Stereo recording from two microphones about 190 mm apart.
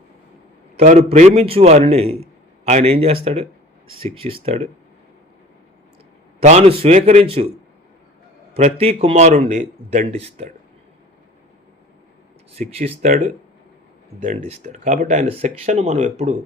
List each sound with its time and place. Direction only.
0.8 s speech: 40° right (ahead or behind)
6.4 s speech: 35° right (ahead or behind)
8.5 s speech: 30° right (ahead or behind)
12.5 s speech: 30° right (ahead or behind)
13.0 s speech: 45° right (ahead or behind)